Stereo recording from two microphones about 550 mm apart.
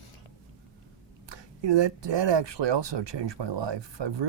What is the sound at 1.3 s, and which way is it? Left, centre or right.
Speech, right.